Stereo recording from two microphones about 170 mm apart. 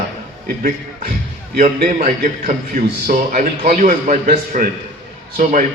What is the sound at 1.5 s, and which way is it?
A man's voice, 45° right (ahead or behind).